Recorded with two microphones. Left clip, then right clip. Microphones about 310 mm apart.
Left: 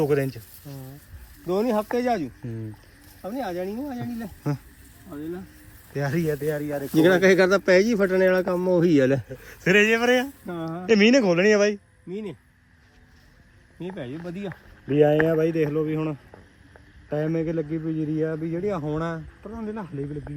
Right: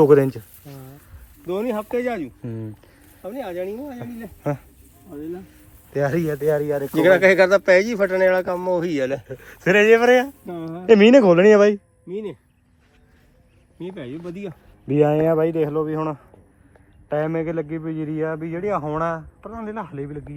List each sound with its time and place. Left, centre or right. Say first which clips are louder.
0.0 s speech: right 9 dB; centre
0.6 s a sound: right 1 dB; centre
1.5 s speech: left 1 dB; left
2.2 s speech: right 2 dB; centre
3.2 s speech: right 1 dB; centre
5.9 s speech: right 5 dB; centre
6.9 s speech: right 3 dB; centre
9.3 s speech: right 3 dB; centre
13.7 s speech: right 2 dB; centre
15.4 s speech: right 3 dB; centre
17.8 s speech: even; centre
18.1 s speech: right 3 dB; centre